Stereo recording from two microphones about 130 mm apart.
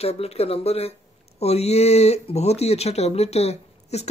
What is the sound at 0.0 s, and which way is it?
Speech, 50° left (ahead or behind).